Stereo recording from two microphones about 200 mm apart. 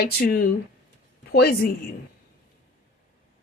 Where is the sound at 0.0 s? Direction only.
50° left (ahead or behind).